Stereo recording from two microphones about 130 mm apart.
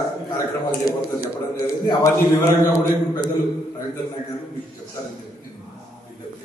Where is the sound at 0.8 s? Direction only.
25° left (ahead or behind).